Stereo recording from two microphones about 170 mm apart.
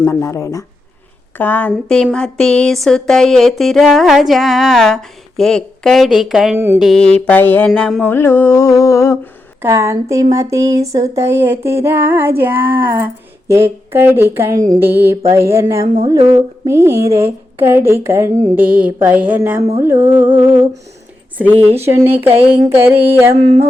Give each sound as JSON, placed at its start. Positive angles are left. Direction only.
{"t": 0.0, "sound": "a sound", "side_deg": 15}
{"t": 9.6, "sound": "a woman's voice", "side_deg": -15}
{"t": 21.8, "sound": "a woman's voice", "side_deg": -15}